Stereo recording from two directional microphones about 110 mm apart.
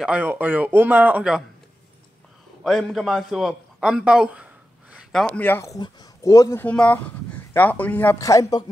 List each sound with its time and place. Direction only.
0.0 s speech: 15° right (ahead or behind)
2.6 s a man's voice: centre (ahead or behind)
5.1 s speech: 5° left (ahead or behind)
5.4 s speech: 15° left (ahead or behind)
5.7 s speech: 30° left (ahead or behind)
6.6 s speech: 15° left (ahead or behind)
8.2 s speech: 30° left (ahead or behind)